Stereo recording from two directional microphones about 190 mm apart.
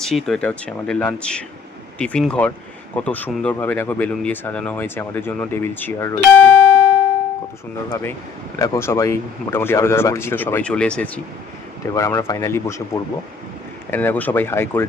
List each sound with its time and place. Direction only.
0.0 s speech: centre (ahead or behind)
7.9 s speech: 15° left (ahead or behind)
11.9 s speech: 15° left (ahead or behind)